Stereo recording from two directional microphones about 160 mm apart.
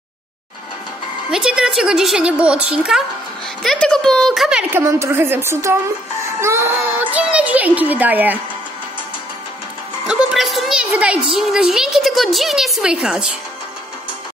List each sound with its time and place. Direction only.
1.3 s a woman's voice: 5° right (ahead or behind)
4.7 s a child's voice: 15° right (ahead or behind)
10.0 s a woman's voice: centre (ahead or behind)